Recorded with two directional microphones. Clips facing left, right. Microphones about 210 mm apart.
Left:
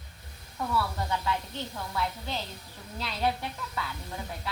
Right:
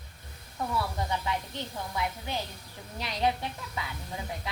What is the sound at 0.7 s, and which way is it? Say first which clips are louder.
A woman's voice: left 1 dB; 20° right (ahead or behind).